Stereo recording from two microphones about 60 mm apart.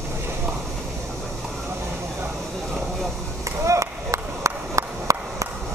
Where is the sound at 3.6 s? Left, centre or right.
Right.